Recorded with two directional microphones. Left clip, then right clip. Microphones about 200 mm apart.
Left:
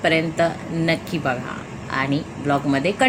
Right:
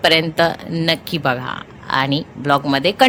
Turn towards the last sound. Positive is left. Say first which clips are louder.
# right 5 dB
turn(degrees=-45)  # may be behind; listen again after turning